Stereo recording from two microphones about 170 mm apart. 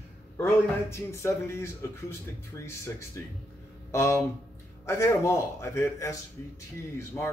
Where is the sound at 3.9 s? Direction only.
15° left (ahead or behind).